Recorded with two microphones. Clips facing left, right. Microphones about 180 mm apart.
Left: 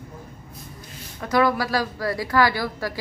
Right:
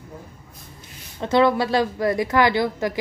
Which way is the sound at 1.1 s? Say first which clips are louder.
Right 3 dB; 25° right (ahead or behind).